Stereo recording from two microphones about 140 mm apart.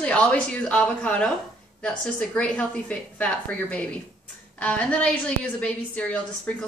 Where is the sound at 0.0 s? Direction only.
10° left (ahead or behind).